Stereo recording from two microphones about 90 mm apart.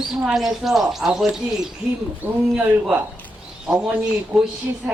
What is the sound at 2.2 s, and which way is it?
Speech, 15° right (ahead or behind).